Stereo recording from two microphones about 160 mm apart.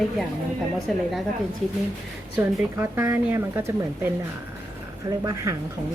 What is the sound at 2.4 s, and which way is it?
Speech, 10° right (ahead or behind).